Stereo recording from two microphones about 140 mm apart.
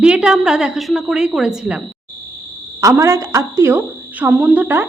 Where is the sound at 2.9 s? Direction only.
20° right (ahead or behind).